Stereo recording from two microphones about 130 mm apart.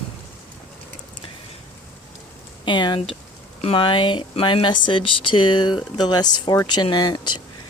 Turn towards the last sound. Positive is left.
turn(degrees=35)  # may be behind; listen again after turning